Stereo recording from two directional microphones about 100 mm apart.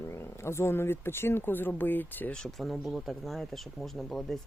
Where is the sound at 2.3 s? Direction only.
Centre (ahead or behind).